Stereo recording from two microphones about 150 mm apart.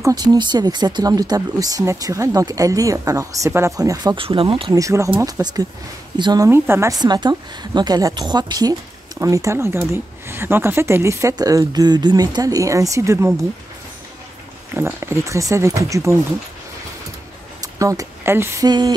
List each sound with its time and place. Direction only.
0.0 s speech: 25° right (ahead or behind)
4.7 s speech: 20° right (ahead or behind)
14.7 s speech: 15° right (ahead or behind)
17.6 s speech: 20° right (ahead or behind)
18.7 s speech: 30° right (ahead or behind)